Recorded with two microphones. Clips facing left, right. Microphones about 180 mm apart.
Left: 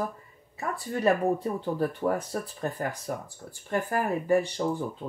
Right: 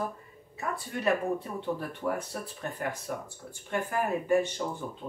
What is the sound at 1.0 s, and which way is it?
Speech, 35° left (ahead or behind).